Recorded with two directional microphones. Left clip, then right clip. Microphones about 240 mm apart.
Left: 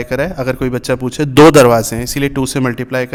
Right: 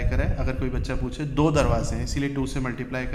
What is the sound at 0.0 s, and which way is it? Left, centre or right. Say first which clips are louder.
A man's voice: left 13 dB; left.